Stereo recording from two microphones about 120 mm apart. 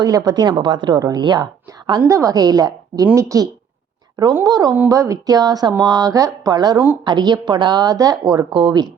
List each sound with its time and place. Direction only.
0.0 s a woman's voice: 35° right (ahead or behind)